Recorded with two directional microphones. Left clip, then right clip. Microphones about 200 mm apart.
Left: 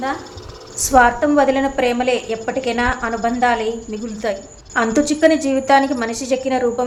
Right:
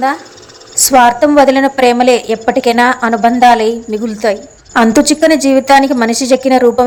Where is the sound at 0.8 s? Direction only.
40° right (ahead or behind).